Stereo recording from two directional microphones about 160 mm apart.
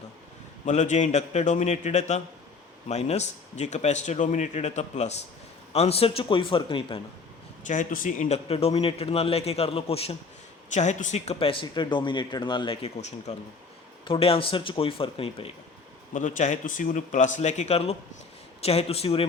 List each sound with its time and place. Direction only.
0.6 s a man's voice: 50° left (ahead or behind); by 7.0 s 30° left (ahead or behind)
7.7 s a man's voice: 55° left (ahead or behind)
8.4 s speech: 40° left (ahead or behind)
16.1 s a man's voice: 50° left (ahead or behind)